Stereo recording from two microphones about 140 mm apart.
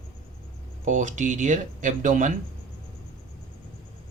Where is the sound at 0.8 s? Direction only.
65° right (ahead or behind).